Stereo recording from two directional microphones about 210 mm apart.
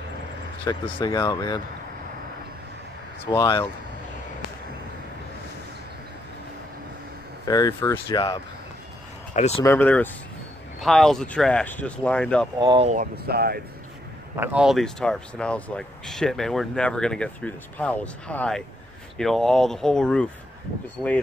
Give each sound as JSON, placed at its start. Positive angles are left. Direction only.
{"t": 0.7, "sound": "speech", "side_deg": 20}
{"t": 3.3, "sound": "speech", "side_deg": 20}
{"t": 7.4, "sound": "speech", "side_deg": 15}
{"t": 9.3, "sound": "speech", "side_deg": 30}
{"t": 9.7, "sound": "speech", "side_deg": 10}
{"t": 12.5, "sound": "speech", "side_deg": -20}
{"t": 12.8, "sound": "speech", "side_deg": -40}
{"t": 14.3, "sound": "speech", "side_deg": -10}
{"t": 21.0, "sound": "speech", "side_deg": -5}